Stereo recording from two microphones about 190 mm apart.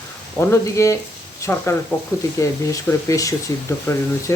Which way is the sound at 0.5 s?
15° left (ahead or behind).